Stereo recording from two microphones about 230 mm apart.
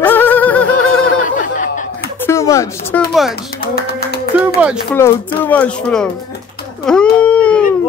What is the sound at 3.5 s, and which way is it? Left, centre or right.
Music, left.